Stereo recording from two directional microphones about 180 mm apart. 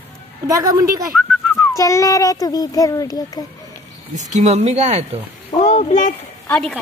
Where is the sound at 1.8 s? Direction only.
20° left (ahead or behind).